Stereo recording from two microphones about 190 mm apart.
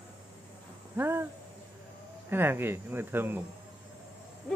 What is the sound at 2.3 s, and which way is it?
Speech, 10° right (ahead or behind).